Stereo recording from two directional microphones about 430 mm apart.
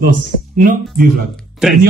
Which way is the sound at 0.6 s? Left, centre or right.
Centre.